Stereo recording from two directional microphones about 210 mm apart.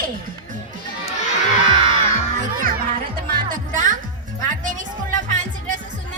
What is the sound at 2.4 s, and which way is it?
Music, 40° right (ahead or behind).